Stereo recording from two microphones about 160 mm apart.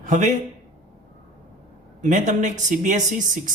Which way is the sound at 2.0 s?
50° right (ahead or behind).